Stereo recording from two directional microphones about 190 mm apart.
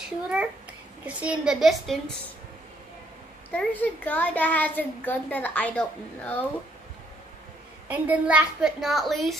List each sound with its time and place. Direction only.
1.0 s a woman's voice: 5° right (ahead or behind)
3.5 s a child's voice: 10° left (ahead or behind)
7.9 s a woman's voice: 5° right (ahead or behind)